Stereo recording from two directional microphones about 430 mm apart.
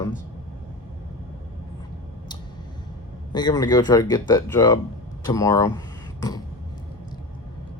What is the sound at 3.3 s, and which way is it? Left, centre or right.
Speech, centre.